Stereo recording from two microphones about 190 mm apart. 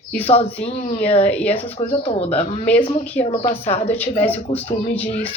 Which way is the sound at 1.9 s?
30° left (ahead or behind).